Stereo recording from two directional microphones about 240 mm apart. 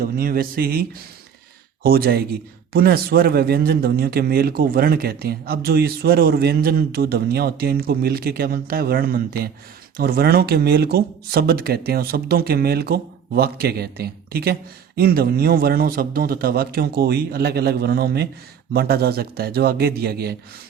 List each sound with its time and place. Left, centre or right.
0.0 s speech: right